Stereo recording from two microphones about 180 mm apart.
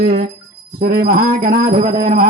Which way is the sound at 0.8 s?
55° right (ahead or behind).